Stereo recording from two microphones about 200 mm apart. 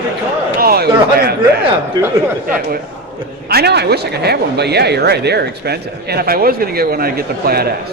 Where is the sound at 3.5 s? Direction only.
55° right (ahead or behind).